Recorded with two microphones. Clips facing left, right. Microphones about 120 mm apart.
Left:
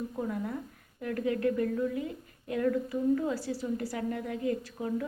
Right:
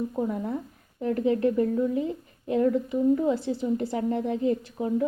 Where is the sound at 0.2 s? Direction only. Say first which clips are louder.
Right 4 dB; 25° right (ahead or behind).